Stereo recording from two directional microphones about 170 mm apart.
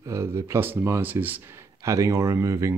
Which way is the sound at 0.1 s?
15° right (ahead or behind).